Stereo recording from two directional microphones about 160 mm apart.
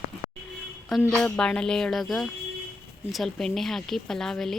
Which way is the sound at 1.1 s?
5° left (ahead or behind).